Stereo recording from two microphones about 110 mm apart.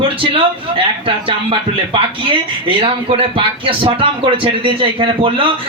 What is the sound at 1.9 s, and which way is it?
A man's voice, 55° right (ahead or behind).